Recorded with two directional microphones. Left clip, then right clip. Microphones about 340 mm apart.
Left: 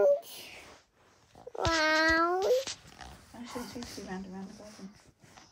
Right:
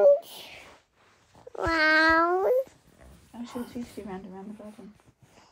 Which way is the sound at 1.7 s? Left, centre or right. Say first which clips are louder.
Right 5 dB; right.